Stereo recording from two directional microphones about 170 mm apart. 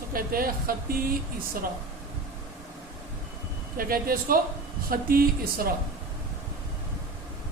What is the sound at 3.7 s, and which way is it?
Speech, 60° right (ahead or behind).